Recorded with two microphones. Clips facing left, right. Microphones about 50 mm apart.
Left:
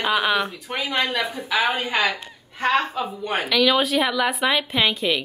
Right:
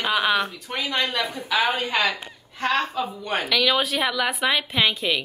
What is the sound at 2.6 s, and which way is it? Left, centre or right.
Speech, centre.